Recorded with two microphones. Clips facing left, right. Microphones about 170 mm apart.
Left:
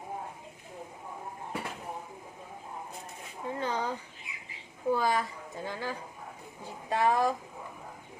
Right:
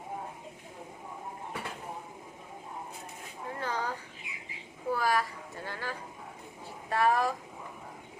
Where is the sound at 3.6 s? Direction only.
20° left (ahead or behind).